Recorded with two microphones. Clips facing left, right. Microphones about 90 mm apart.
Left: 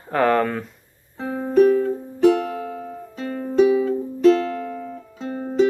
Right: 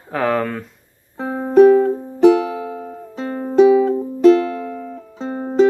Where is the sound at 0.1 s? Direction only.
Centre (ahead or behind).